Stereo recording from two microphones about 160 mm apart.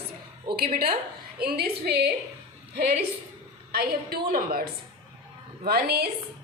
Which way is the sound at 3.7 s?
70° right (ahead or behind).